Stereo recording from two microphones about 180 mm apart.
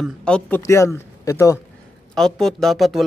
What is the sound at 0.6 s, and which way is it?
Speech, 15° left (ahead or behind).